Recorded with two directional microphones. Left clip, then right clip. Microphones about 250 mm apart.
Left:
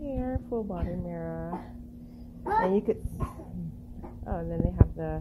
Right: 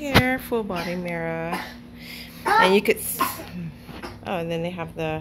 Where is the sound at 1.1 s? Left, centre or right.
Centre.